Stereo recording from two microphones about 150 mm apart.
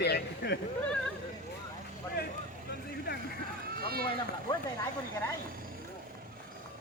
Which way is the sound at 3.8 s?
90° right.